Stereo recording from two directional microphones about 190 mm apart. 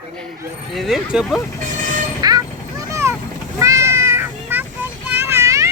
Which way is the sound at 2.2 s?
20° right (ahead or behind).